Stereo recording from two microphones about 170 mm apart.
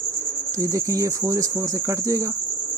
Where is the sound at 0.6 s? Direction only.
20° right (ahead or behind).